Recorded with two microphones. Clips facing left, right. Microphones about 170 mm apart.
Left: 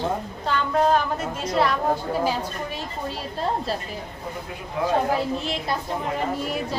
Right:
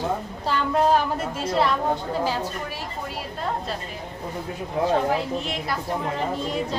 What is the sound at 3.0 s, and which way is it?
Speech, 30° left (ahead or behind).